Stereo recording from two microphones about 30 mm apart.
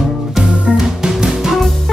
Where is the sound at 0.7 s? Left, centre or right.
Centre.